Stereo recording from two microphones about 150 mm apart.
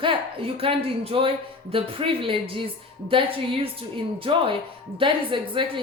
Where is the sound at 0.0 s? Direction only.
35° right (ahead or behind).